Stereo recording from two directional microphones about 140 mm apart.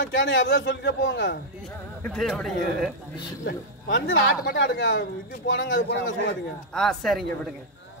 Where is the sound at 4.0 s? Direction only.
90° left.